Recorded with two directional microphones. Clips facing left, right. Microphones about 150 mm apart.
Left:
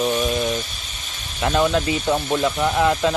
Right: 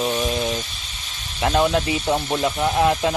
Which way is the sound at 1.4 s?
15° right (ahead or behind).